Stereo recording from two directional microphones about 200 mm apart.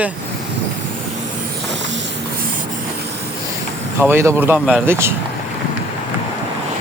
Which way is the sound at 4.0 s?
10° right (ahead or behind).